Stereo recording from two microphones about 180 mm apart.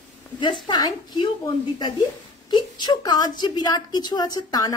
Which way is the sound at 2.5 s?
25° left (ahead or behind).